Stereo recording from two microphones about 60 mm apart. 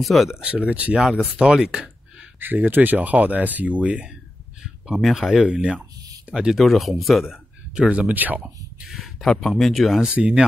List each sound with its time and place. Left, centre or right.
0.0 s speech: centre
0.3 s speech: centre
0.9 s speech: centre
2.4 s speech: right
5.0 s speech: centre
5.4 s speech: right
6.5 s speech: centre
7.2 s speech: centre; by 8.5 s right
9.2 s speech: centre
10.1 s speech: right